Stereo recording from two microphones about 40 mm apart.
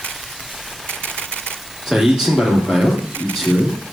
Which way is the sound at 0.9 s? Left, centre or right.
Left.